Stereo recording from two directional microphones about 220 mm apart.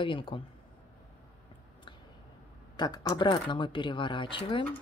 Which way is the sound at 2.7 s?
20° left (ahead or behind).